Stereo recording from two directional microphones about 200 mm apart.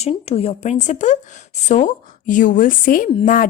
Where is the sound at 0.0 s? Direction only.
30° left (ahead or behind).